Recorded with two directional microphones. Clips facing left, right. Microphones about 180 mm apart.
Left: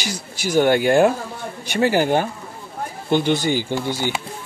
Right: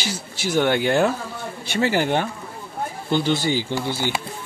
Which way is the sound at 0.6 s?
45° left (ahead or behind).